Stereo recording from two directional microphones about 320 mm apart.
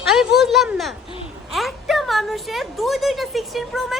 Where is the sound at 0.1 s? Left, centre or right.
Centre.